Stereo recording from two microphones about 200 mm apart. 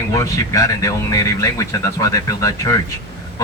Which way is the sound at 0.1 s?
15° left (ahead or behind).